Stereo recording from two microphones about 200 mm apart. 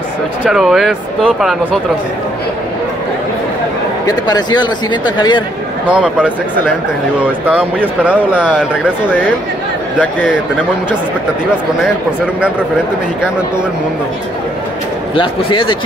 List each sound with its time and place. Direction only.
0.4 s speech: centre (ahead or behind)
4.0 s a man's voice: 20° left (ahead or behind)
5.9 s speech: 5° right (ahead or behind)
7.4 s speech: 5° right (ahead or behind)
15.1 s a man's voice: 25° left (ahead or behind)